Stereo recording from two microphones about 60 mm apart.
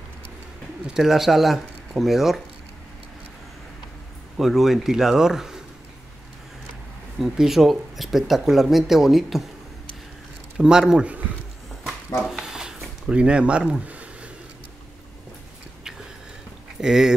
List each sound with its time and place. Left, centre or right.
0.8 s speech: centre
4.4 s speech: centre
7.2 s speech: centre
10.6 s speech: centre
12.2 s a sound: centre
13.0 s speech: centre
16.8 s speech: centre